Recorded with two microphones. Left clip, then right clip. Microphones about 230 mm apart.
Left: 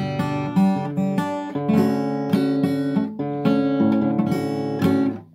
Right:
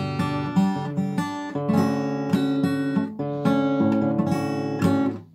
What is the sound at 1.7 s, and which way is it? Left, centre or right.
Guitar, left.